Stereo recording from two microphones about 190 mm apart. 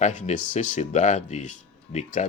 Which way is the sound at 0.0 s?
40° left (ahead or behind).